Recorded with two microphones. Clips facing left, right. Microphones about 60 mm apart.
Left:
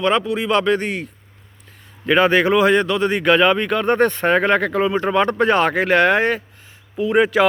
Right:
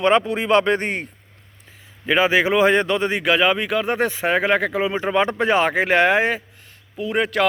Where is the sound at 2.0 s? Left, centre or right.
Centre.